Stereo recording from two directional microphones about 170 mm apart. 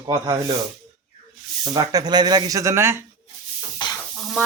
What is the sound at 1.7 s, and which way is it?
Speech, 20° right (ahead or behind).